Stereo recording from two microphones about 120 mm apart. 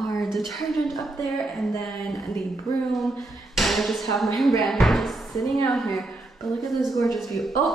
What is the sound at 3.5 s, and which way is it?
Speech, centre (ahead or behind).